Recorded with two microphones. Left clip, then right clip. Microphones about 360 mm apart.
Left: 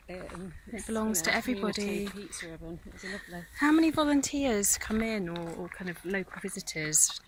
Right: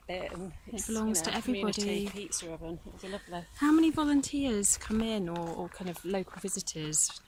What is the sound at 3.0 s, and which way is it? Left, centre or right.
Speech, right.